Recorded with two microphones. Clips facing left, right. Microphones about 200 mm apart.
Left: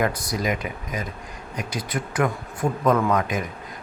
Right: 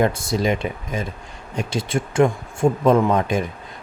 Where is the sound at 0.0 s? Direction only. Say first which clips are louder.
Right 5 dB; 25° right (ahead or behind).